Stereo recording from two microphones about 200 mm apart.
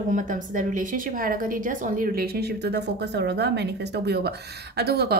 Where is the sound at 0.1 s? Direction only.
40° right (ahead or behind).